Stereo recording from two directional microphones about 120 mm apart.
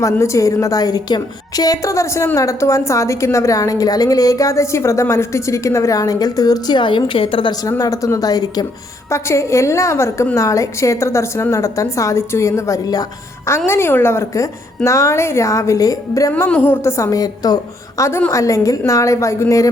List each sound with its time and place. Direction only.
0.0 s a woman's voice: 25° left (ahead or behind); by 7.5 s 45° left (ahead or behind)
7.6 s a woman's voice: 30° left (ahead or behind)
16.5 s a woman's voice: 15° left (ahead or behind)